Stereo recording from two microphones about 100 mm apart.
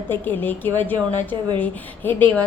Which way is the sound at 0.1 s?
20° left (ahead or behind).